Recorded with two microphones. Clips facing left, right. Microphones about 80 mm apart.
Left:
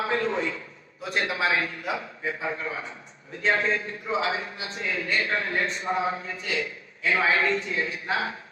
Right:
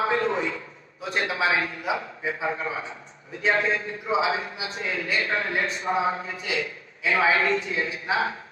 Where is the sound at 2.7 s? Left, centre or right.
Centre.